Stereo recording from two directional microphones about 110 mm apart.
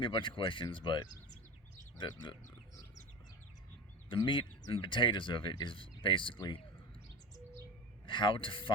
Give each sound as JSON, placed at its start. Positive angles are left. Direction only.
{"t": 0.0, "sound": "speech", "side_deg": 50}
{"t": 4.3, "sound": "speech", "side_deg": 50}
{"t": 8.0, "sound": "speech", "side_deg": 50}